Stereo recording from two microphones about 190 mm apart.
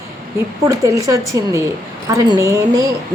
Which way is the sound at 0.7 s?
15° right (ahead or behind).